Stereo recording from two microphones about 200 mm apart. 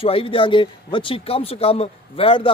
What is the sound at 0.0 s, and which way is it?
A man's voice, 30° left (ahead or behind).